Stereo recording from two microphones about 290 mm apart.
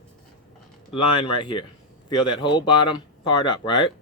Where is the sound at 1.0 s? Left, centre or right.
Centre.